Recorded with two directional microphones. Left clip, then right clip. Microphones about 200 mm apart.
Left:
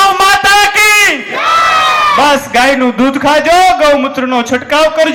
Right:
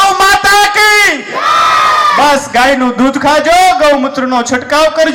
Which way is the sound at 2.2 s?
35° left (ahead or behind).